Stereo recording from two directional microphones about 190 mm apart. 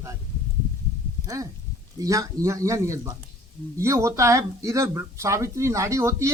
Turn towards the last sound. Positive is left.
turn(degrees=-15)  # may be behind; listen again after turning